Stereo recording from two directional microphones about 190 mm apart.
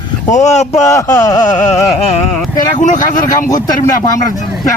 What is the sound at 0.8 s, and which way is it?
Speech, 15° left (ahead or behind).